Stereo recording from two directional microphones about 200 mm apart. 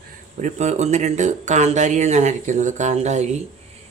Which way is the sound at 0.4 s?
35° right (ahead or behind).